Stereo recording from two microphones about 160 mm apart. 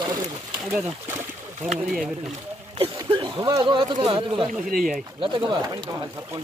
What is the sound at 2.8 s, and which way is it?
Speech, 30° right (ahead or behind).